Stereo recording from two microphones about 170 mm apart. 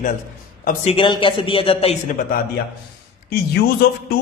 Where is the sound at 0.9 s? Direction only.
30° left (ahead or behind).